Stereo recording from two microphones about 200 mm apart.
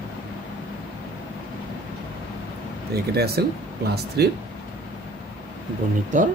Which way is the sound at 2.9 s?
50° right (ahead or behind).